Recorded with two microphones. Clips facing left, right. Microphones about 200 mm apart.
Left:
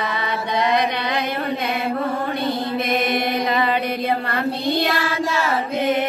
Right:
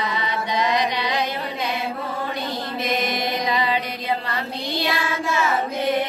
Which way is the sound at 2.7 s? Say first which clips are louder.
Left 1 dB; 55° left (ahead or behind).